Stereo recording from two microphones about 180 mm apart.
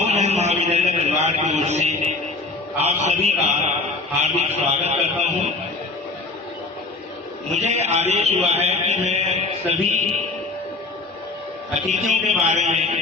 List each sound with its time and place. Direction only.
0.0 s a sound: 40° right (ahead or behind)
2.8 s music: 40° right (ahead or behind)
4.4 s a man's voice: 35° right (ahead or behind)
7.5 s music: 40° right (ahead or behind)
11.9 s music: 40° right (ahead or behind)